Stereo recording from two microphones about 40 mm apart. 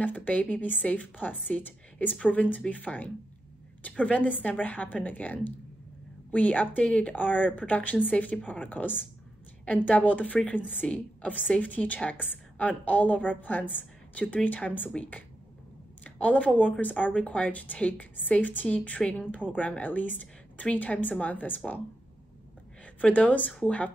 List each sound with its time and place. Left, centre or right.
0.0 s a woman's voice: left
22.9 s a woman's voice: left